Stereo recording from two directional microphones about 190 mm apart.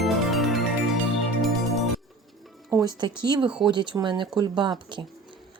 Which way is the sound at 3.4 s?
5° right (ahead or behind).